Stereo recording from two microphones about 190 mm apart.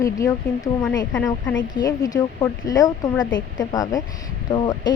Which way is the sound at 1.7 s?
20° left (ahead or behind).